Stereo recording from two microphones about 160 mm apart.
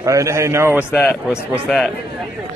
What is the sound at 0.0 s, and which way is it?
Speech, 20° right (ahead or behind).